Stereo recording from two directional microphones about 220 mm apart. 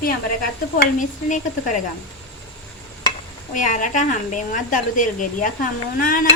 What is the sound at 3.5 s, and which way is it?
Speech, 35° left (ahead or behind).